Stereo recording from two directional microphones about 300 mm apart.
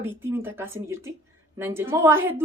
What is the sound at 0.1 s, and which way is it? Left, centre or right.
A woman's voice, centre.